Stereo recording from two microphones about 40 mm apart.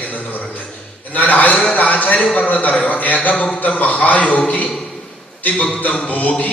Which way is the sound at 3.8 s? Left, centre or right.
Left.